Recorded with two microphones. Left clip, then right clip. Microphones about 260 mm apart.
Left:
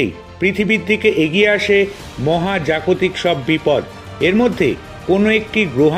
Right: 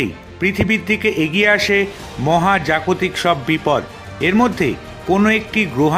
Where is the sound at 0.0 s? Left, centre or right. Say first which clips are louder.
Left 2 dB; centre.